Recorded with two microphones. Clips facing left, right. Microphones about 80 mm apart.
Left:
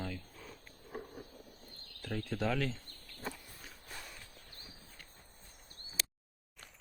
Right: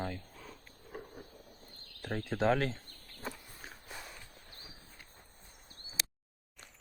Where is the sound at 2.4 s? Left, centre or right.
Right.